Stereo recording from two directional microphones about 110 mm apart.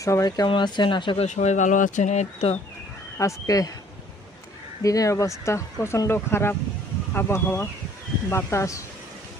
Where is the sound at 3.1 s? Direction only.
25° left (ahead or behind).